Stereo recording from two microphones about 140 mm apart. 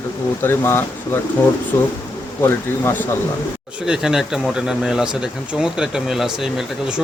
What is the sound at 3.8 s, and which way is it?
Speech, 5° right (ahead or behind).